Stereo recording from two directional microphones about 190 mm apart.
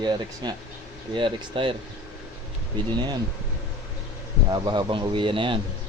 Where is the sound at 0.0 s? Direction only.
20° right (ahead or behind).